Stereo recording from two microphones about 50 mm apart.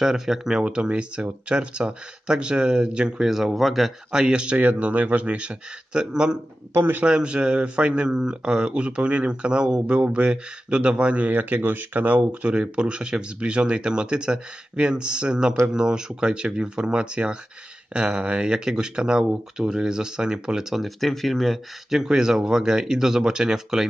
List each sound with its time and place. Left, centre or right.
0.0 s speech: centre
3.3 s speech: centre
4.1 s speech: centre
12.5 s speech: centre
20.7 s speech: centre
21.9 s speech: centre